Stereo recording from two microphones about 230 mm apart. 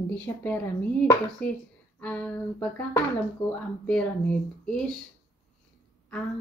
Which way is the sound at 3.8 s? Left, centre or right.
Centre.